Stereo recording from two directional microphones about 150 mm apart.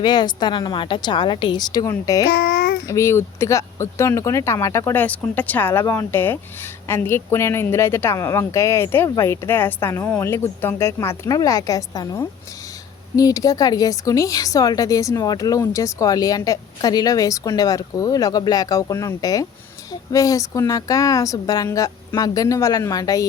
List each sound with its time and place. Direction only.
0.0 s a woman's voice: 30° left (ahead or behind)
2.3 s child singing: 90° left
2.8 s a woman's voice: 20° left (ahead or behind)